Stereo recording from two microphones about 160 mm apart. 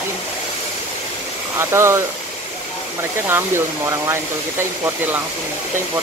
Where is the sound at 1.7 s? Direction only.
15° right (ahead or behind).